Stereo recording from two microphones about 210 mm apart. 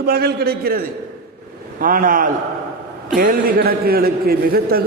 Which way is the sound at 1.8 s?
40° right (ahead or behind).